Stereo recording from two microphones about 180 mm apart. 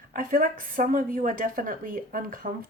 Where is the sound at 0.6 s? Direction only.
50° right (ahead or behind).